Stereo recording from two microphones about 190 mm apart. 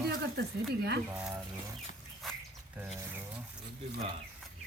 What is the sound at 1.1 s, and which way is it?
Speech, 5° right (ahead or behind).